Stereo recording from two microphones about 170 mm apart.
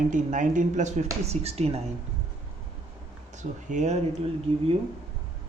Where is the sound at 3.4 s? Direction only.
45° right (ahead or behind).